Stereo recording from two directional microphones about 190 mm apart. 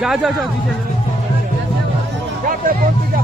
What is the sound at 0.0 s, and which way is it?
Speech, centre (ahead or behind).